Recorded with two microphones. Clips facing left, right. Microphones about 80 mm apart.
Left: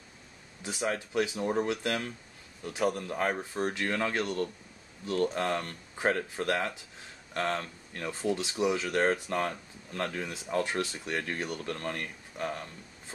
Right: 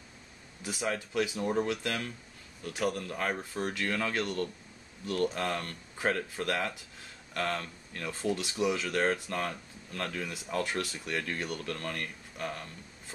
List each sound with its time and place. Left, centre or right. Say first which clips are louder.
0.7 s speech: left 1 dB; centre